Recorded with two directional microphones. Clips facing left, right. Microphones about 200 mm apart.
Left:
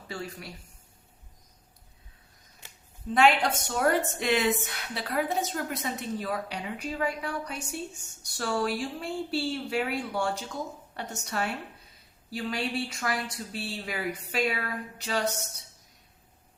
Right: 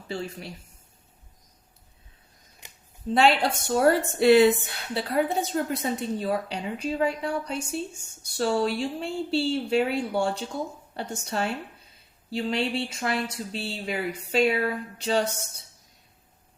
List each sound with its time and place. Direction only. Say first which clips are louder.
0.1 s a woman's voice: right 5 dB; 25° right (ahead or behind)
2.6 s a sound: right 1 dB; 15° right (ahead or behind)
3.2 s a woman's voice: right 1 dB; 30° right (ahead or behind)